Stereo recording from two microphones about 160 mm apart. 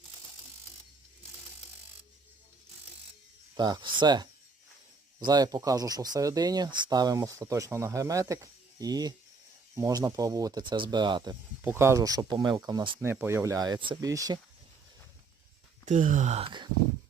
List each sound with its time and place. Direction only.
3.6 s speech: 30° right (ahead or behind)
11.6 s speech: 15° right (ahead or behind)
13.0 s speech: 15° right (ahead or behind)
15.9 s speech: 50° right (ahead or behind)